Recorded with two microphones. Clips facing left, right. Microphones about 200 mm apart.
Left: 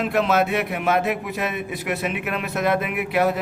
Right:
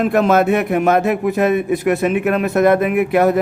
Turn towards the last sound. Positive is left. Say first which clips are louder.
# right 7 dB
turn(degrees=-50)  # may be behind; listen again after turning